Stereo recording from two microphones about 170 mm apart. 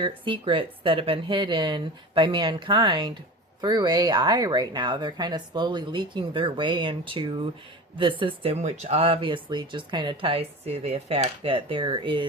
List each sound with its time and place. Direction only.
0.0 s speech: 30° right (ahead or behind)